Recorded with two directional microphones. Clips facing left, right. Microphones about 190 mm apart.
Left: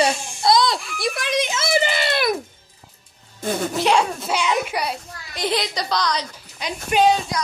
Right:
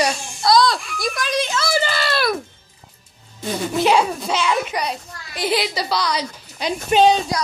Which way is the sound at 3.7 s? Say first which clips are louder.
Right 4 dB; centre (ahead or behind).